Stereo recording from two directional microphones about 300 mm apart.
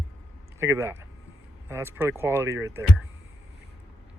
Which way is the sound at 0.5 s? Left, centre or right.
Centre.